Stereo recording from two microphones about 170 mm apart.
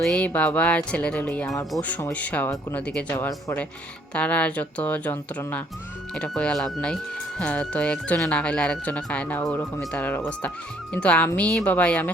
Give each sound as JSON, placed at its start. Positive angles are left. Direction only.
{"t": 0.0, "sound": "speech", "side_deg": 5}